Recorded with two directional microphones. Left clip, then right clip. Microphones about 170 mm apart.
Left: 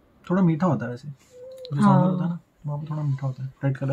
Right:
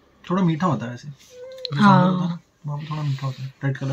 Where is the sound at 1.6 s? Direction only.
5° left (ahead or behind).